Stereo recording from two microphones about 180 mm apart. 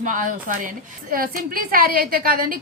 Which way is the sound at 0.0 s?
45° right (ahead or behind).